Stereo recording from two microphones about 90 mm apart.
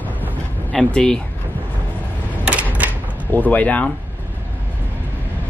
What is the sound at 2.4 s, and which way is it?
Typewriter, 15° right (ahead or behind).